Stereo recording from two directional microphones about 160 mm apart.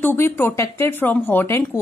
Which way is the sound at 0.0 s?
15° left (ahead or behind).